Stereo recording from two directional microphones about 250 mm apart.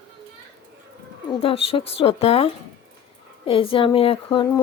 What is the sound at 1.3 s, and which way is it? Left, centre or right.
Speech, left.